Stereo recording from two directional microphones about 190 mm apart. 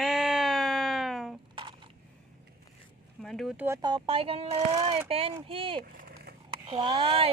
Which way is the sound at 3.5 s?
15° right (ahead or behind).